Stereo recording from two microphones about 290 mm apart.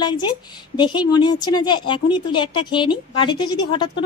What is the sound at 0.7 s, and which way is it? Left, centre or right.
Speech, centre.